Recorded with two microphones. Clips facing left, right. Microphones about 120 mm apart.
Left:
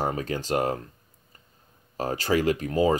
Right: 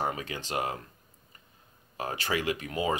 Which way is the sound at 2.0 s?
35° left (ahead or behind).